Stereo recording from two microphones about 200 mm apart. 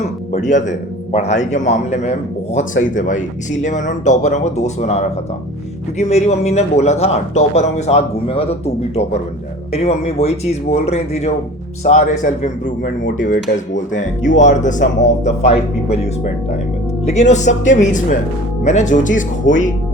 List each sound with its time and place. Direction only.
0.0 s a man's voice: 35° left (ahead or behind)
17.1 s a man's voice: 35° left (ahead or behind)